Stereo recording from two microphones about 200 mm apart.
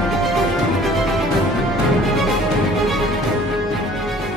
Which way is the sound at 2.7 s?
Centre (ahead or behind).